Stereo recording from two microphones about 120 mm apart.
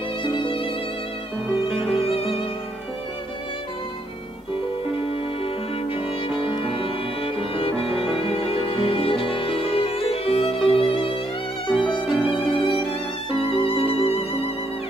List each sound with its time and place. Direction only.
0.2 s violin: 45° left (ahead or behind)
2.0 s violin: 55° left (ahead or behind)
6.2 s music: 45° left (ahead or behind)
7.7 s music: centre (ahead or behind)
8.3 s music: 55° left (ahead or behind)
12.1 s violin: 5° right (ahead or behind)
12.5 s violin: 45° left (ahead or behind)
13.5 s music: 50° left (ahead or behind)